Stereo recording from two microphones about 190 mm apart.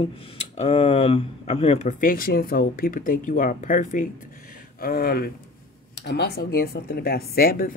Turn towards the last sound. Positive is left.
turn(degrees=50)  # may be behind; listen again after turning